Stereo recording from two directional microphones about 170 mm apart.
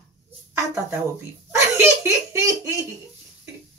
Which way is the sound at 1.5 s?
15° right (ahead or behind).